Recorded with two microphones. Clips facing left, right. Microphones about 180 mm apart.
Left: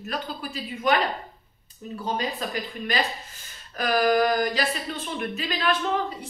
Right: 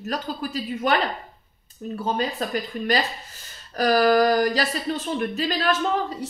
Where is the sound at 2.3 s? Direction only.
45° right (ahead or behind).